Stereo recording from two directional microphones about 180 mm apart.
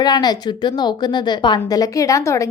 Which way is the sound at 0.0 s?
25° left (ahead or behind).